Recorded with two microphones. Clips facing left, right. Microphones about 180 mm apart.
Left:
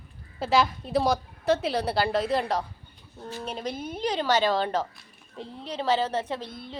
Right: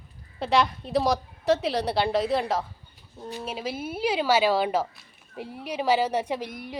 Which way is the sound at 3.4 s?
5° right (ahead or behind).